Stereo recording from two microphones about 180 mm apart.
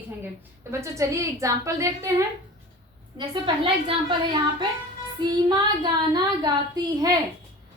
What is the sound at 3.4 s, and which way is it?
A woman's voice, 30° right (ahead or behind).